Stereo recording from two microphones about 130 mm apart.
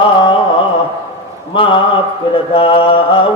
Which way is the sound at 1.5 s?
40° left (ahead or behind).